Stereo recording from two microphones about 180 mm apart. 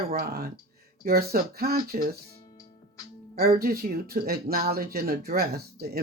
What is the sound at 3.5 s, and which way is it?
Speech, 55° right (ahead or behind).